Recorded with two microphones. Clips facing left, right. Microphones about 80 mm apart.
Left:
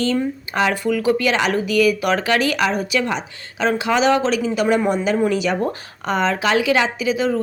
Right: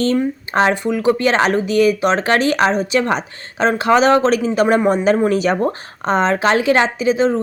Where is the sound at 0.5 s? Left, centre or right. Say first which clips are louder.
Right 3 dB; right.